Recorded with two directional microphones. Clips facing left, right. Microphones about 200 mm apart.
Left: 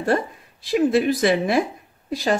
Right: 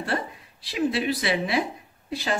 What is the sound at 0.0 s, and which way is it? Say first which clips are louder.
A woman's voice: left 7 dB; 45° left (ahead or behind).